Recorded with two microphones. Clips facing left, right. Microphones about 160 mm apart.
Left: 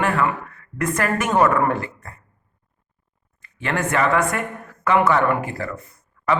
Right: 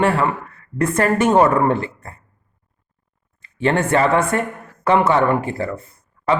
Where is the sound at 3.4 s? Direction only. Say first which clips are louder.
Right 6 dB; 30° right (ahead or behind).